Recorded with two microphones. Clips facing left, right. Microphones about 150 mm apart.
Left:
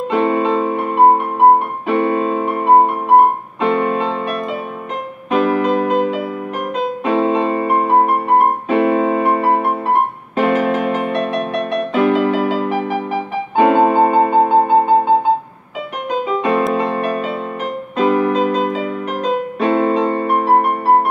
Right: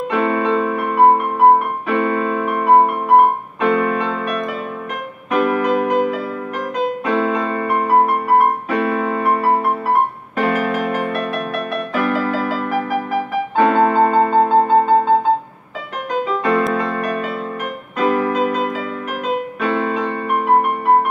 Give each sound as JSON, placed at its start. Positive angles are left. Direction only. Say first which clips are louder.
{"t": 0.1, "sound": "music", "louder": "left 2 dB", "side_deg": 25}
{"t": 1.9, "sound": "keyboard", "louder": "left 3 dB", "side_deg": 25}
{"t": 3.6, "sound": "music", "louder": "left 1 dB", "side_deg": 25}
{"t": 8.0, "sound": "piano", "louder": "left 1 dB", "side_deg": 25}
{"t": 16.1, "sound": "music", "louder": "left 1 dB", "side_deg": 20}